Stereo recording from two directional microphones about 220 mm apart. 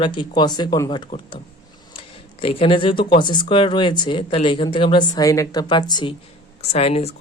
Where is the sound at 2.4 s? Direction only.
25° left (ahead or behind).